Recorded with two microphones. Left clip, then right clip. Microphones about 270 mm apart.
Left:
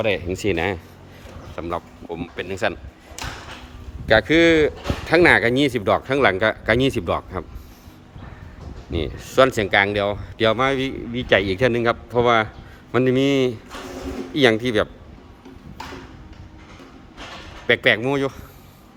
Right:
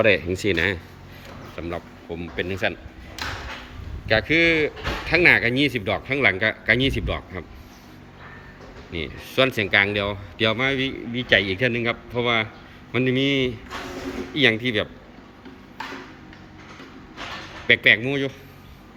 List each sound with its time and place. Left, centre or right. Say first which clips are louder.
0.1 s speech: right 2 dB; centre
3.2 s a sound: right 2 dB; left
4.1 s speech: left 4 dB; left
8.9 s speech: left 4 dB; centre
15.8 s a sound: right 2 dB; left
17.7 s speech: even; centre